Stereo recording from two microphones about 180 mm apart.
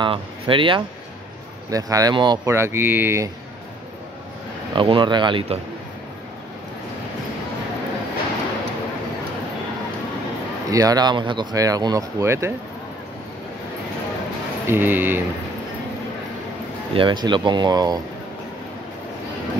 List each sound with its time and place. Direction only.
0.0 s speech: 30° right (ahead or behind); by 3.3 s 10° right (ahead or behind)
4.7 s speech: 25° right (ahead or behind)
10.7 s speech: 20° right (ahead or behind)
14.7 s speech: 10° right (ahead or behind)
16.9 s speech: 25° right (ahead or behind)